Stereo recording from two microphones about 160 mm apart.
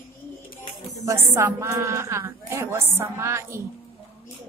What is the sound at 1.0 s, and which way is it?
A woman's voice, 15° right (ahead or behind).